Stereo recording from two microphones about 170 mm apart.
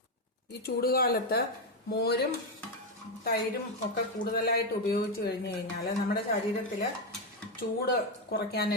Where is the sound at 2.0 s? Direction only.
70° left (ahead or behind).